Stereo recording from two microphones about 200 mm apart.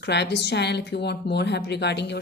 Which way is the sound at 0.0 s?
60° left (ahead or behind).